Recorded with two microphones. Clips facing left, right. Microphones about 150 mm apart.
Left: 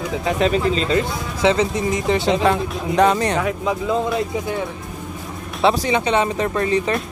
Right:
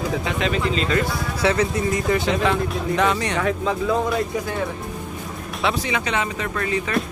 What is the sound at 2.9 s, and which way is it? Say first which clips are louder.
Speech: left 6 dB; 40° left (ahead or behind).